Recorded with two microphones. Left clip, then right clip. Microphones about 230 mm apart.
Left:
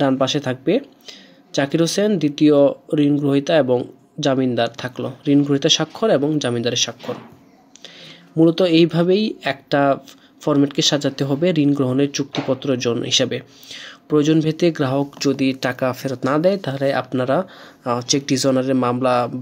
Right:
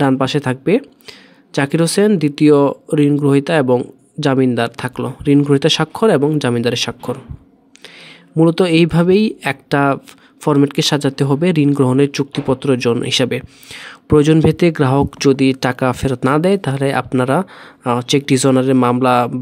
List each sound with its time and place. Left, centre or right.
0.0 s speech: right